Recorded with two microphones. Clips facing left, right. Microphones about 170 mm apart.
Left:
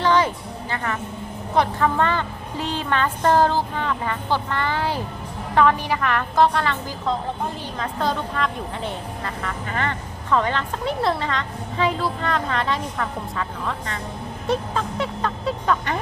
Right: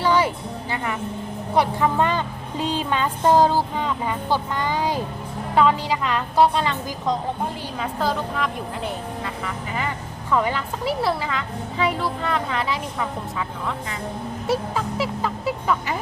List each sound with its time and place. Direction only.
0.0 s music: 10° right (ahead or behind)
1.5 s a woman's voice: 15° right (ahead or behind)
7.8 s a woman's voice: 5° right (ahead or behind)
14.4 s music: 5° right (ahead or behind)